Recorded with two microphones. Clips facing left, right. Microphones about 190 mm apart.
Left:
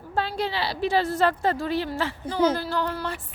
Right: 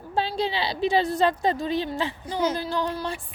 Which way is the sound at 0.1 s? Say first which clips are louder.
Right 1 dB; 15° right (ahead or behind).